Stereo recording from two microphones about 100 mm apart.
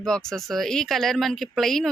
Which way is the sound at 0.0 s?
5° left (ahead or behind).